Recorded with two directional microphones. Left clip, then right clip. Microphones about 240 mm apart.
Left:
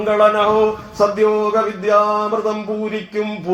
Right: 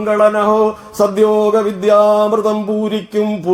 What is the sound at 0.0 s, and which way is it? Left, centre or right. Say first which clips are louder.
Speech: right 1 dB; right.